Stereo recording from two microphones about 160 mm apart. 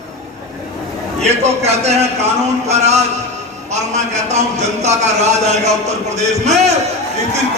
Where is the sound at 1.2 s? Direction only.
45° right (ahead or behind).